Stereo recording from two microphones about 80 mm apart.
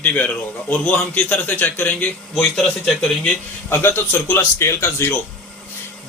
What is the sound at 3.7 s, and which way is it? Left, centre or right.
A man's voice, left.